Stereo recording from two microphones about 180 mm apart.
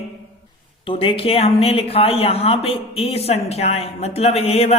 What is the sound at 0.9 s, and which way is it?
Speech, 30° left (ahead or behind).